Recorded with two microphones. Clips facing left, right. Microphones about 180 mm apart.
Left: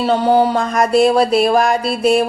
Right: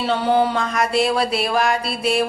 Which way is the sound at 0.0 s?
40° left (ahead or behind).